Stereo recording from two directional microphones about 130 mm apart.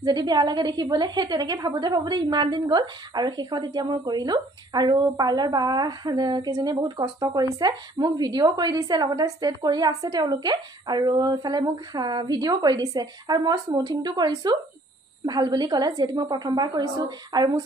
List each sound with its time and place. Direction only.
0.0 s a woman's voice: 30° right (ahead or behind)